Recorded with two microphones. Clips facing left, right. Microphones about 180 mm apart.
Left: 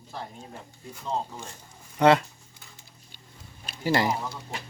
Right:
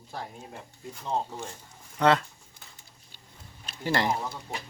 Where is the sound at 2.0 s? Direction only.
10° left (ahead or behind).